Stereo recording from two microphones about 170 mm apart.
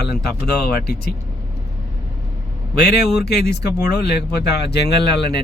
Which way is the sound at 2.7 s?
75° left (ahead or behind).